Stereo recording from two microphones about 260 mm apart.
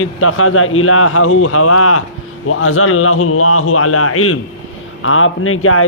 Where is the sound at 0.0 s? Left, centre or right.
Left.